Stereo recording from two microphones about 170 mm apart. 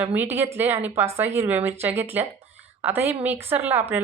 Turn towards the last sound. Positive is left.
turn(degrees=-10)  # may be behind; listen again after turning